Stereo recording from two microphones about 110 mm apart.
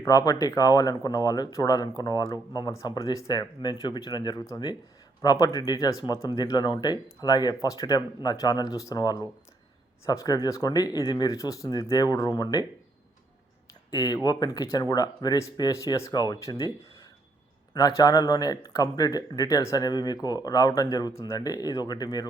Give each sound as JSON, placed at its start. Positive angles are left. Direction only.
{"t": 0.0, "sound": "speech", "side_deg": 35}
{"t": 13.9, "sound": "speech", "side_deg": 35}
{"t": 17.7, "sound": "speech", "side_deg": 35}